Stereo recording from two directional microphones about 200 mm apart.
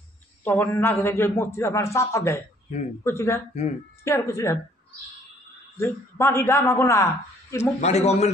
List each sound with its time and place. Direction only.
0.4 s a man's voice: 10° left (ahead or behind)
5.8 s a man's voice: 10° left (ahead or behind)
7.8 s a man's voice: 35° left (ahead or behind)